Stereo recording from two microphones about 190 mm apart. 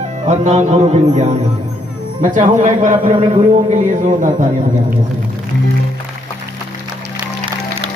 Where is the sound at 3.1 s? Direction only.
30° right (ahead or behind).